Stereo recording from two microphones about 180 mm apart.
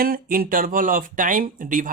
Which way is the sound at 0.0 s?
55° right (ahead or behind).